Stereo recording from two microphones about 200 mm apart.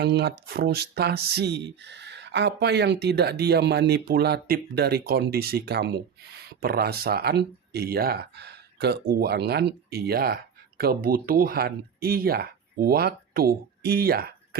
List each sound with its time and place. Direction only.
0.0 s speech: 55° right (ahead or behind)